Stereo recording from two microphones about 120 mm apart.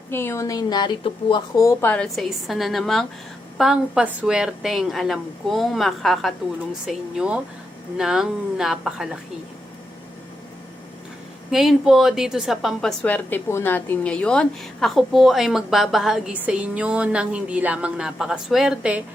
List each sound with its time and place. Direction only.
0.1 s speech: 20° left (ahead or behind)
1.8 s a woman's voice: 10° left (ahead or behind)
2.1 s a woman's voice: centre (ahead or behind)
11.5 s a woman's voice: 5° right (ahead or behind)
13.0 s a woman's voice: 15° left (ahead or behind); by 19.0 s 10° right (ahead or behind)